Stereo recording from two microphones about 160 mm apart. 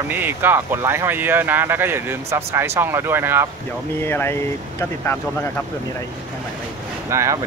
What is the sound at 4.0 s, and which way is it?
Speech, 15° left (ahead or behind).